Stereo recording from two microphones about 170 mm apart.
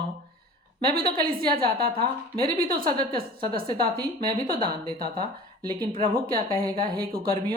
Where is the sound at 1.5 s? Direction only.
60° right (ahead or behind).